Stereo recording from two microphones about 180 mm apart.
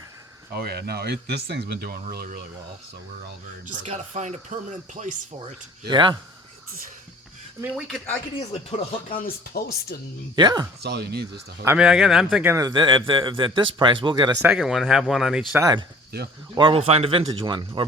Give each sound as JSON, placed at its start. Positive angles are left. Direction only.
{"t": 0.5, "sound": "speech", "side_deg": -65}
{"t": 3.7, "sound": "speech", "side_deg": -40}
{"t": 5.9, "sound": "speech", "side_deg": -25}
{"t": 7.8, "sound": "speech", "side_deg": 0}
{"t": 9.1, "sound": "speech", "side_deg": 55}
{"t": 10.3, "sound": "speech", "side_deg": -25}
{"t": 10.8, "sound": "speech", "side_deg": -60}
{"t": 11.6, "sound": "speech", "side_deg": -10}
{"t": 12.5, "sound": "speech", "side_deg": -20}
{"t": 14.4, "sound": "speech", "side_deg": -5}
{"t": 15.5, "sound": "speech", "side_deg": -20}
{"t": 16.6, "sound": "speech", "side_deg": -30}